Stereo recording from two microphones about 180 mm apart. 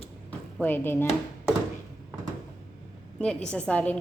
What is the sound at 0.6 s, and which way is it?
Speech, 10° left (ahead or behind).